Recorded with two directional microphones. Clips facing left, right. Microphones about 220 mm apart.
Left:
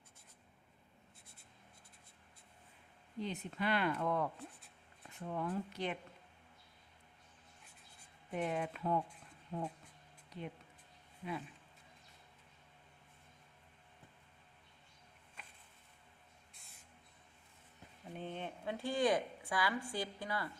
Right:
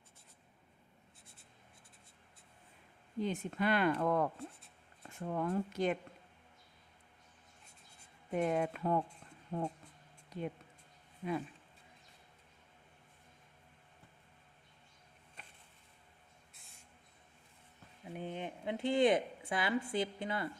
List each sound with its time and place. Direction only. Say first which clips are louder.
3.2 s speech: right 5 dB; 50° right (ahead or behind)
8.3 s speech: right 5 dB; 45° right (ahead or behind)
16.6 s a sound: right 1 dB; centre (ahead or behind)
18.0 s a woman's voice: right 2 dB; 10° right (ahead or behind)